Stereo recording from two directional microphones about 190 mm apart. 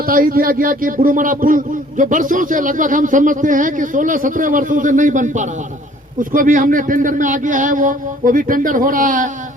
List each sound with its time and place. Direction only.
0.0 s speech: 50° right (ahead or behind)